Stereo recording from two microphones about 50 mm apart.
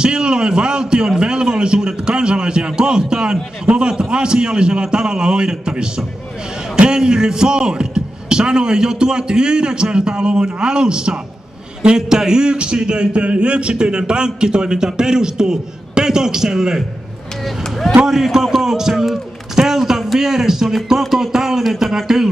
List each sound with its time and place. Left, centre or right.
0.0 s a man's voice: centre
18.0 s a man's voice: centre